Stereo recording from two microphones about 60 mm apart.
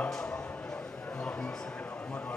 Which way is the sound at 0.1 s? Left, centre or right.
Centre.